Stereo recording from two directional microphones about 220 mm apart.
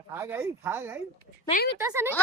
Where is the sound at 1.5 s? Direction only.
45° left (ahead or behind).